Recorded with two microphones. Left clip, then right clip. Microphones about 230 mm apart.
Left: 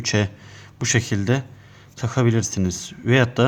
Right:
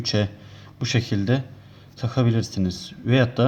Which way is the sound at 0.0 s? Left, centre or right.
Left.